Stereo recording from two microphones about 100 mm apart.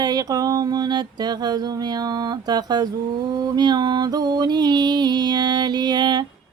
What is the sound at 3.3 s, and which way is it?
Music, 45° right (ahead or behind).